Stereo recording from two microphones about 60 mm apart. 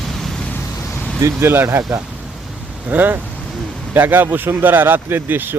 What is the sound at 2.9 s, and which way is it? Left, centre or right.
Speech, right.